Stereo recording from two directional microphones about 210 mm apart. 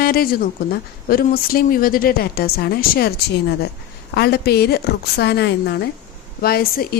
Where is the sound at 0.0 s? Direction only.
45° left (ahead or behind).